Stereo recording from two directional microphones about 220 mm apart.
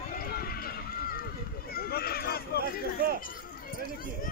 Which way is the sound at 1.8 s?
45° left (ahead or behind).